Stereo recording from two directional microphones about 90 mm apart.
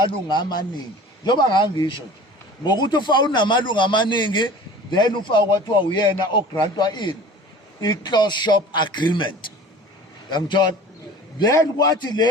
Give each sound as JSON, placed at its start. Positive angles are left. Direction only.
{"t": 0.0, "sound": "a man's voice", "side_deg": 55}